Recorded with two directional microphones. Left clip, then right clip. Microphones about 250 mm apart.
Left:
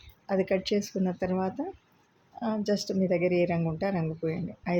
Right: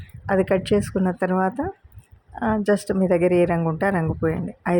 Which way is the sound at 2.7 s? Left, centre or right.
Right.